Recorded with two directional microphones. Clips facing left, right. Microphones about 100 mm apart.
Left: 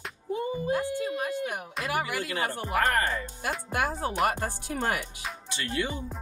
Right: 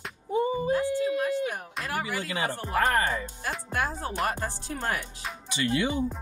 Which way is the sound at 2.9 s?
20° right (ahead or behind).